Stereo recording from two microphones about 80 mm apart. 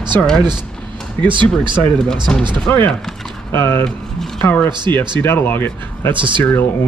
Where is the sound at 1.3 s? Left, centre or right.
Right.